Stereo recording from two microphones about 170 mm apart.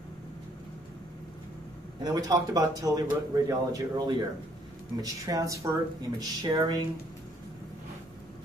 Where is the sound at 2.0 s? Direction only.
20° right (ahead or behind).